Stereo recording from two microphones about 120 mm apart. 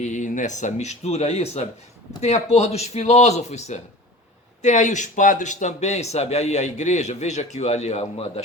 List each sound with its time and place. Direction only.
0.0 s a man's voice: 90° left; by 3.8 s 70° left (ahead or behind)
4.6 s a man's voice: 90° left; by 8.3 s 65° left (ahead or behind)